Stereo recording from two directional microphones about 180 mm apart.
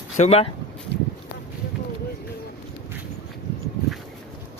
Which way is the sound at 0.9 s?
70° left (ahead or behind).